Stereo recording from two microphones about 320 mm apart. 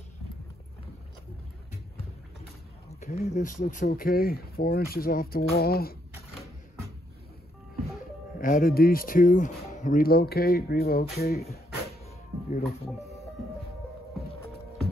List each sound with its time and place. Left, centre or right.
3.0 s speech: left
8.4 s speech: left
12.4 s speech: left